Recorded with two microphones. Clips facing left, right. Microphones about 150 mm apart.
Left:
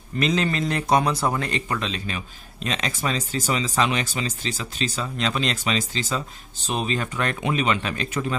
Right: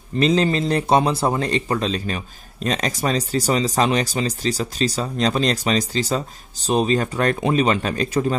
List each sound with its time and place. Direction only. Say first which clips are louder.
0.2 s speech: right 5 dB; 30° right (ahead or behind)